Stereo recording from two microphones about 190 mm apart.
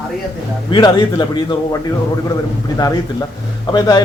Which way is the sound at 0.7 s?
25° left (ahead or behind).